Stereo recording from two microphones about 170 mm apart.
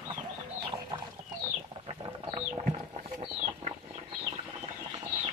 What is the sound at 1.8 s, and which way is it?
Chicken, 25° right (ahead or behind).